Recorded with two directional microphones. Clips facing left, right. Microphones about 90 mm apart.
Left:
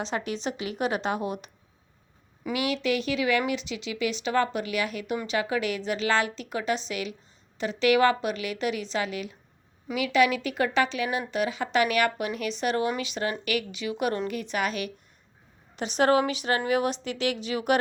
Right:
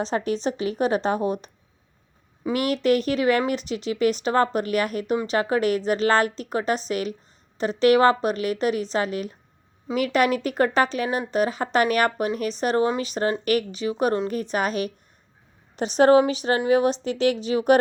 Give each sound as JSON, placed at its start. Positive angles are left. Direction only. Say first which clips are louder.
{"t": 0.0, "sound": "speech", "louder": "right 6 dB", "side_deg": -40}
{"t": 2.5, "sound": "speech", "louder": "right 6 dB", "side_deg": -45}